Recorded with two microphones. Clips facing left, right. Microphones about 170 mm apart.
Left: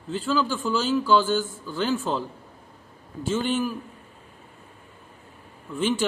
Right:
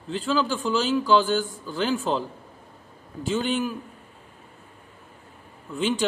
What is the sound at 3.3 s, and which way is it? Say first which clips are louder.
Speech: even; 15° right (ahead or behind).